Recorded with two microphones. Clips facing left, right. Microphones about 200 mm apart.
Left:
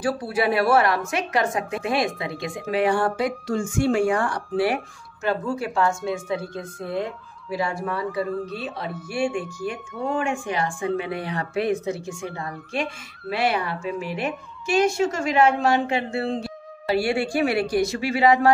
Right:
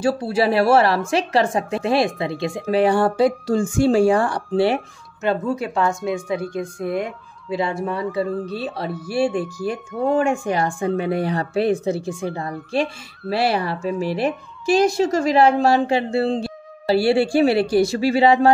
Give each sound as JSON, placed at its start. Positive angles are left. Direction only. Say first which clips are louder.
{"t": 0.0, "sound": "speech", "louder": "right 4 dB", "side_deg": -25}